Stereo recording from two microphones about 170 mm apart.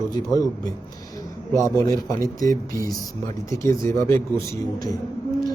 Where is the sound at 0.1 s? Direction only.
20° left (ahead or behind).